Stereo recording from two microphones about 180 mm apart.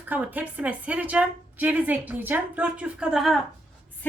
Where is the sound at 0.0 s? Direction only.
10° right (ahead or behind).